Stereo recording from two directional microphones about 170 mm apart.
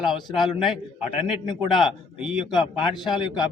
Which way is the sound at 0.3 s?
Centre (ahead or behind).